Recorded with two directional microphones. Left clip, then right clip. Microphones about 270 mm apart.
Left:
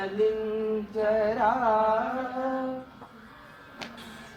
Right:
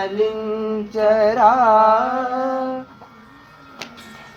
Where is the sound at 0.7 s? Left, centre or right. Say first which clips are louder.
Right 11 dB; right.